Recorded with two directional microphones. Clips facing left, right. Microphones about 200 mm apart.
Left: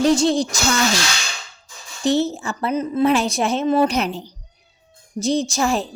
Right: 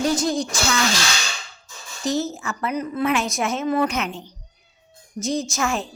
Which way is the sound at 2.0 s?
30° left (ahead or behind).